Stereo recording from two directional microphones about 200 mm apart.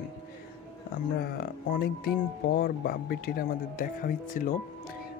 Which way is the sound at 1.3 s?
50° left (ahead or behind).